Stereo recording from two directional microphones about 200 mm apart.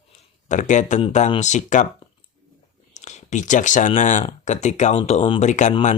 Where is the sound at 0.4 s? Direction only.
40° left (ahead or behind).